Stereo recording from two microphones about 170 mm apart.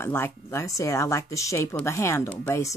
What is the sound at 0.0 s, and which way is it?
Speech, 15° left (ahead or behind).